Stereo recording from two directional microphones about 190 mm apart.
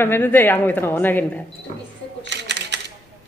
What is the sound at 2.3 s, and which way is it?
Camera, 65° right (ahead or behind).